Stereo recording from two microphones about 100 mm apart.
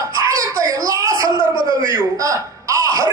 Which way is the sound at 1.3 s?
45° left (ahead or behind).